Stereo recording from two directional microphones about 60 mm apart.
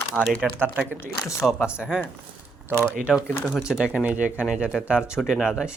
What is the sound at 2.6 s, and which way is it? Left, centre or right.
Speech, right.